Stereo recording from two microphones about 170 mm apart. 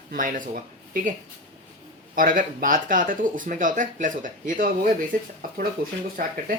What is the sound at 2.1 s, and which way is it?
Speech, 55° right (ahead or behind).